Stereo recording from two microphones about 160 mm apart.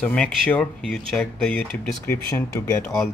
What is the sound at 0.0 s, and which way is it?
Speech, 5° left (ahead or behind).